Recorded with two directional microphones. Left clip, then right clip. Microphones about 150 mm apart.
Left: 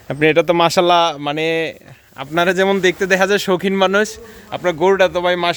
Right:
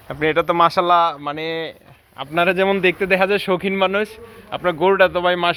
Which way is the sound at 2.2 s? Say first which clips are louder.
Left 2 dB; 35° left (ahead or behind).